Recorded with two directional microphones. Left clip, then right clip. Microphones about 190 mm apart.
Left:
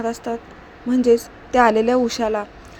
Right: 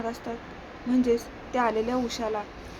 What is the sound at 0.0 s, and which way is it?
A woman's voice, 30° left (ahead or behind).